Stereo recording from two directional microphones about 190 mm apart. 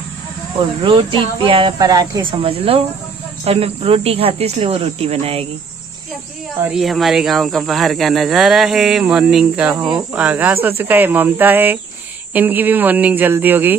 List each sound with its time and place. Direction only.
0.8 s speech: 25° right (ahead or behind)
6.6 s speech: centre (ahead or behind)